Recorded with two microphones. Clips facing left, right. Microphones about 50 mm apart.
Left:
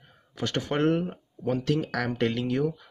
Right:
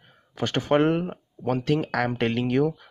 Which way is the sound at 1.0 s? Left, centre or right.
Right.